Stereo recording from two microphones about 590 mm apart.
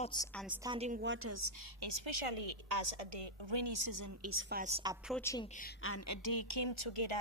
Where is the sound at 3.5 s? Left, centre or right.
Right.